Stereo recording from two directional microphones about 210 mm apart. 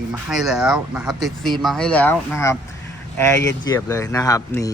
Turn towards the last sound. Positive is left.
turn(degrees=15)  # may be behind; listen again after turning